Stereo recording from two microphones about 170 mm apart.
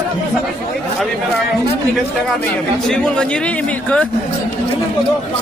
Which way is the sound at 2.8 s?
5° left (ahead or behind).